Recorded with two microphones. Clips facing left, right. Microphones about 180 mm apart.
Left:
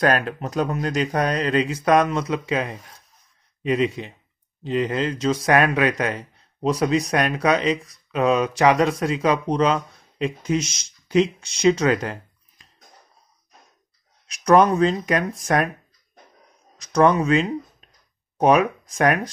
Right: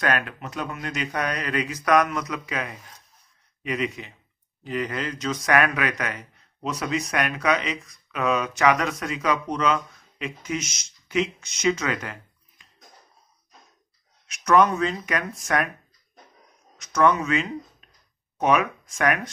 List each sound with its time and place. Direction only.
0.0 s speech: 35° left (ahead or behind)
14.2 s speech: 35° left (ahead or behind)
16.7 s speech: 35° left (ahead or behind)